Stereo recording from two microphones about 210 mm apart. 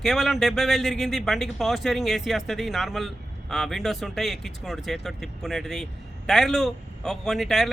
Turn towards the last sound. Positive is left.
turn(degrees=0)  # may be behind; listen again after turning